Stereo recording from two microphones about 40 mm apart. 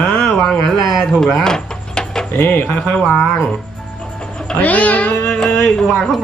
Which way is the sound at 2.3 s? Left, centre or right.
Left.